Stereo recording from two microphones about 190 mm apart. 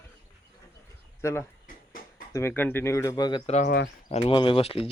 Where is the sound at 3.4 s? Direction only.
35° left (ahead or behind).